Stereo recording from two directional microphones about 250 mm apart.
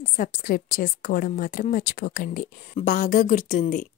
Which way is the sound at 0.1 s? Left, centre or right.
Left.